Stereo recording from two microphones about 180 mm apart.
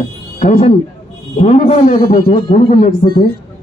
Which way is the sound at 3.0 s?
45° left (ahead or behind).